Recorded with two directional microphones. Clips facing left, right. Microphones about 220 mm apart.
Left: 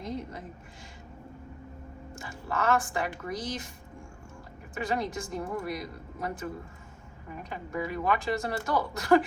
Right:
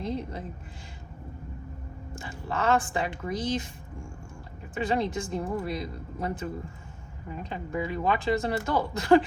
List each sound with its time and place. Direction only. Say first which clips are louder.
0.0 s a sound: right 4 dB; 30° right (ahead or behind)
2.1 s speech: right 1 dB; 30° right (ahead or behind)
4.7 s a woman's voice: right 4 dB; 25° right (ahead or behind)